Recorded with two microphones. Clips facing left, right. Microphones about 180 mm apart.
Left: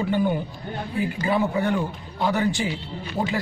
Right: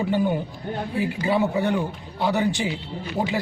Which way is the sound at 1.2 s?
15° right (ahead or behind).